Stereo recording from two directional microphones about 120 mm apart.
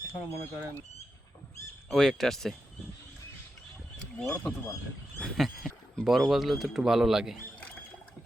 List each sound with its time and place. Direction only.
0.1 s speech: 20° left (ahead or behind)
1.9 s speech: centre (ahead or behind)
4.2 s speech: 5° left (ahead or behind)